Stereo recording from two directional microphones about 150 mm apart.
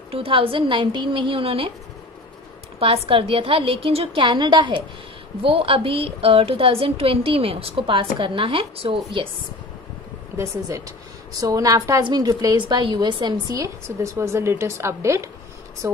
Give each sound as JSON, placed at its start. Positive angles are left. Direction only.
{"t": 0.1, "sound": "a woman's voice", "side_deg": -40}
{"t": 2.8, "sound": "a woman's voice", "side_deg": -40}
{"t": 10.3, "sound": "a woman's voice", "side_deg": -20}